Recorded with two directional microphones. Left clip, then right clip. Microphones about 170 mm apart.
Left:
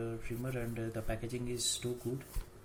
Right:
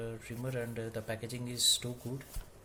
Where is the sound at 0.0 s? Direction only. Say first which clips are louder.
Even; 55° right (ahead or behind).